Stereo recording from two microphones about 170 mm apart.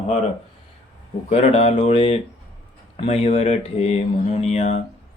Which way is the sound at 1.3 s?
35° left (ahead or behind).